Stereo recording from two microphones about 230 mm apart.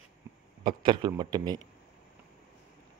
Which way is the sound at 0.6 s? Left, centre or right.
Right.